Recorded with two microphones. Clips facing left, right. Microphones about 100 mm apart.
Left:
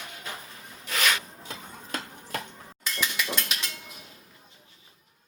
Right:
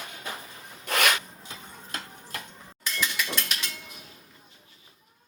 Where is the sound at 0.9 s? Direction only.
60° right (ahead or behind).